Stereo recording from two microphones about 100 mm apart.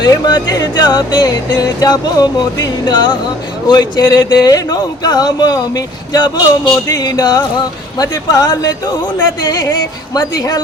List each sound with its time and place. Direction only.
0.0 s music: 45° left (ahead or behind)
6.8 s speech: 40° left (ahead or behind)